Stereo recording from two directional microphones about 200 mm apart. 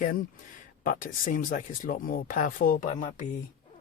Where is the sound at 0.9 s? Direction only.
40° left (ahead or behind).